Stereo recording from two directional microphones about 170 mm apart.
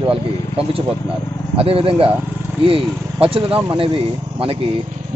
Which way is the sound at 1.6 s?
35° right (ahead or behind).